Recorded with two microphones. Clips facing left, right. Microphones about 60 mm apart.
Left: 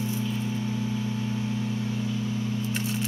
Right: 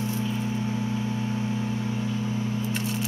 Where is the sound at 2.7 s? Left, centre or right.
Centre.